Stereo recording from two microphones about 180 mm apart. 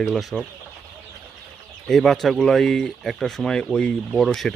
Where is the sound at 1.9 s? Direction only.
Centre (ahead or behind).